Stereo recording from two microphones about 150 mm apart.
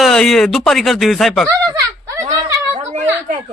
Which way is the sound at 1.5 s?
20° right (ahead or behind).